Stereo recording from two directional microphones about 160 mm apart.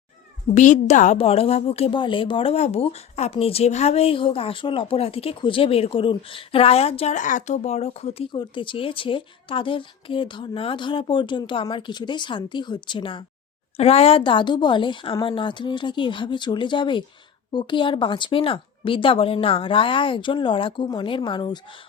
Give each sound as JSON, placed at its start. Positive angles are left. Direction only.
{"t": 0.5, "sound": "a woman's voice", "side_deg": 50}